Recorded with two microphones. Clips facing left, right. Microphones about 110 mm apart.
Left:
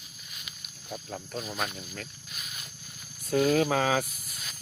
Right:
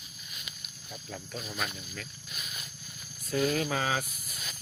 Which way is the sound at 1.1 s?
40° left (ahead or behind).